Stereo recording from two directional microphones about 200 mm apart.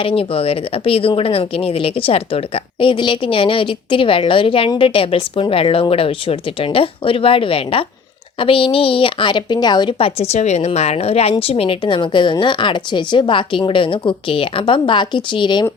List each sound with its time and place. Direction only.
0.0 s speech: 25° left (ahead or behind)